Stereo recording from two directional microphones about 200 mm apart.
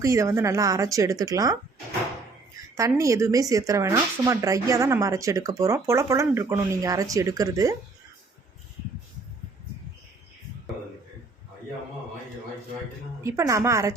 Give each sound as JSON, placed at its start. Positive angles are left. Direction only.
{"t": 0.0, "sound": "speech", "side_deg": -15}
{"t": 2.6, "sound": "a woman's voice", "side_deg": -15}
{"t": 13.2, "sound": "speech", "side_deg": -15}